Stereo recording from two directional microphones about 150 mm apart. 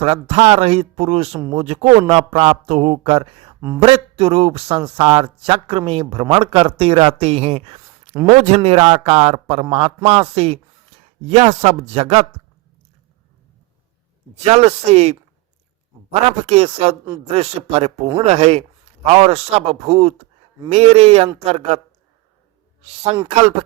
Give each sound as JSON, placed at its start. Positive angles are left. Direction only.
{"t": 0.0, "sound": "speech", "side_deg": -40}
{"t": 2.0, "sound": "speech", "side_deg": -35}
{"t": 14.3, "sound": "speech", "side_deg": -45}
{"t": 16.4, "sound": "speech", "side_deg": -45}